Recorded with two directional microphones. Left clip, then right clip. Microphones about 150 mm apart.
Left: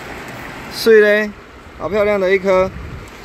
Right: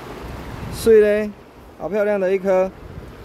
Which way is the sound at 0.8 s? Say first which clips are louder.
Left 3 dB; 5° right (ahead or behind).